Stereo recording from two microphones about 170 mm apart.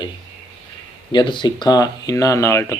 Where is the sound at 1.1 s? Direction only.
30° left (ahead or behind).